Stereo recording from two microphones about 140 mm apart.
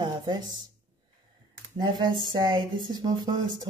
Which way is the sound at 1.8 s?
35° right (ahead or behind).